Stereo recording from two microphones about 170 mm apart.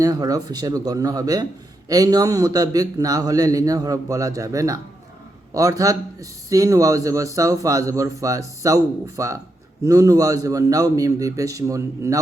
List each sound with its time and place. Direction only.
0.0 s a man's voice: 20° right (ahead or behind)